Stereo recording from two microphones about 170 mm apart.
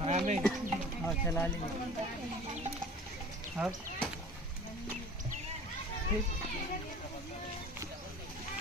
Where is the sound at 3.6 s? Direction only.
10° right (ahead or behind).